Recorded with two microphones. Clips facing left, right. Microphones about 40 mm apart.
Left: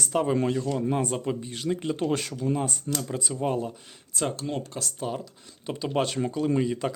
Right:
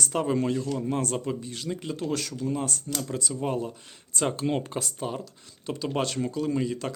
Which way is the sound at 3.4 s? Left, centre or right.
Centre.